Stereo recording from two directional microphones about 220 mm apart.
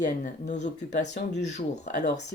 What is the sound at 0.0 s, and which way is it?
Speech, 35° left (ahead or behind).